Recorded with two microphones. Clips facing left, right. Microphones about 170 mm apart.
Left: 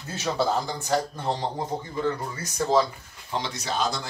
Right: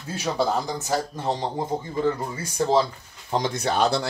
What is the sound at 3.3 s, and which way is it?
Speech, 50° right (ahead or behind).